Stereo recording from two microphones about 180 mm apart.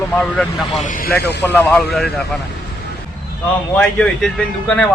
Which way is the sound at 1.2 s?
70° left (ahead or behind).